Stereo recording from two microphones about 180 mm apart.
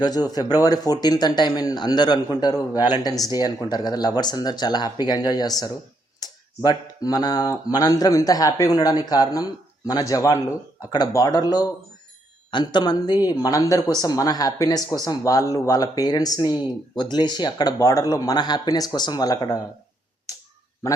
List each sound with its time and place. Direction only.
0.0 s speech: 20° left (ahead or behind)